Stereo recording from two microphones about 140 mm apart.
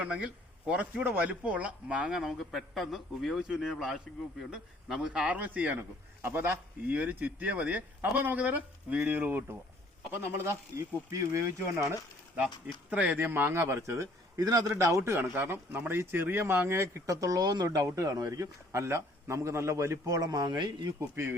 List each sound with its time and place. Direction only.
0.0 s speech: 10° right (ahead or behind)
12.9 s speech: 10° right (ahead or behind); by 20.9 s 30° right (ahead or behind)